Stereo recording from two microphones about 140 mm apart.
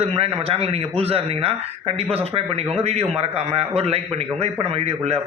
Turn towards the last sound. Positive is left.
turn(degrees=-45)  # may be behind; listen again after turning